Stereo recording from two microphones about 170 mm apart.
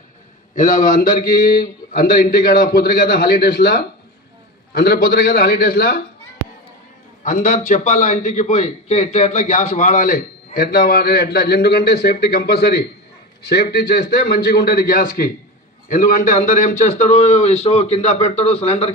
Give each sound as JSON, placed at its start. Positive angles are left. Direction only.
{"t": 0.5, "sound": "a man's voice", "side_deg": 50}
{"t": 7.3, "sound": "a man's voice", "side_deg": 50}